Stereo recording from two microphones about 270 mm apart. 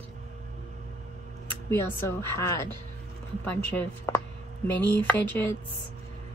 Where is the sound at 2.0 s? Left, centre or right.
Centre.